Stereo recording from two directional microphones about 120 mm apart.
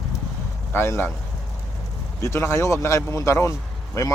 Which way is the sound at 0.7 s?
20° left (ahead or behind).